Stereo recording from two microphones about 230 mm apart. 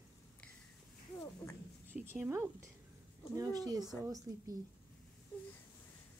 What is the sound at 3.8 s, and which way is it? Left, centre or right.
Speech, centre.